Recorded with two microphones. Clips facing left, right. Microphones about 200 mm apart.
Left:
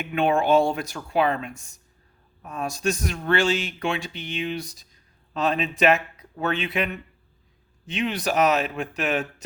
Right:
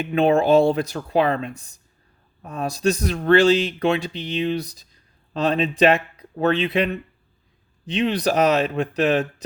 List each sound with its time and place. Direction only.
0.0 s speech: 35° right (ahead or behind)